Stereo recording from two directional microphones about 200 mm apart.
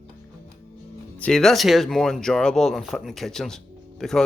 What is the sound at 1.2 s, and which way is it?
Speech, 5° left (ahead or behind).